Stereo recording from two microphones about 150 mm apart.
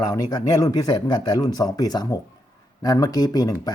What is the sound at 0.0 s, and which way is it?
Speech, 25° left (ahead or behind).